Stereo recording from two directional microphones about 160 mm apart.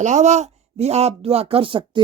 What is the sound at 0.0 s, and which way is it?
Speech, 45° right (ahead or behind).